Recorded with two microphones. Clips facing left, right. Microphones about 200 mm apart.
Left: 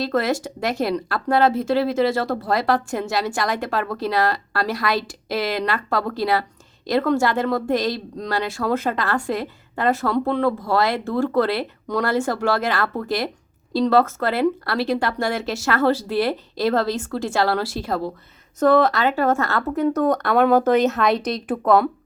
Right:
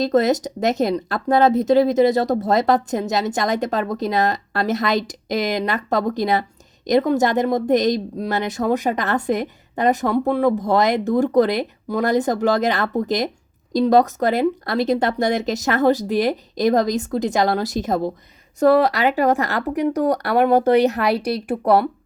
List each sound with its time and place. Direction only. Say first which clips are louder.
0.0 s a woman's voice: right 4 dB; 20° right (ahead or behind)